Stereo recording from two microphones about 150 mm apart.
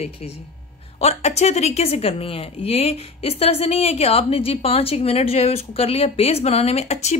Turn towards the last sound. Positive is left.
turn(degrees=45)  # may be behind; listen again after turning